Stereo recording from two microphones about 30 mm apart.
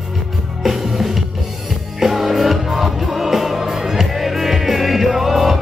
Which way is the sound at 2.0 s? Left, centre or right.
Centre.